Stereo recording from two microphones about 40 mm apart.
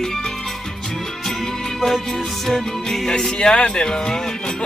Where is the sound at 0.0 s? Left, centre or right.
Centre.